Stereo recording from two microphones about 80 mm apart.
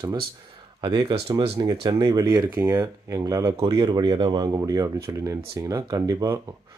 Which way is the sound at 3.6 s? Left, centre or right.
Right.